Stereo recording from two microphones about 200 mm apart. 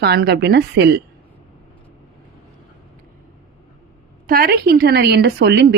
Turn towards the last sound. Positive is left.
turn(degrees=-55)  # may be behind; listen again after turning